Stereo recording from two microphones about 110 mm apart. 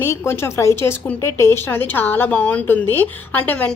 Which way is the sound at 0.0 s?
25° left (ahead or behind).